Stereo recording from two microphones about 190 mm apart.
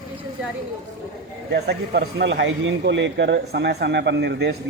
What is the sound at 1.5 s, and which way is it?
Speech, 55° right (ahead or behind).